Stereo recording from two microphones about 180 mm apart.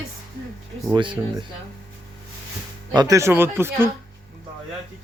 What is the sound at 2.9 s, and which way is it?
Speech, 20° right (ahead or behind).